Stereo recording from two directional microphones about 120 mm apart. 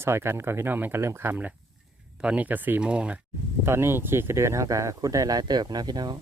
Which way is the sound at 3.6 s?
20° right (ahead or behind).